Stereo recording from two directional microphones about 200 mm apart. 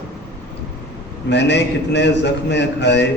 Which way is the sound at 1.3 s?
60° left (ahead or behind).